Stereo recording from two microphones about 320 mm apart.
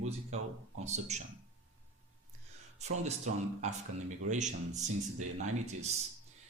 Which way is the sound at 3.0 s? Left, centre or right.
Right.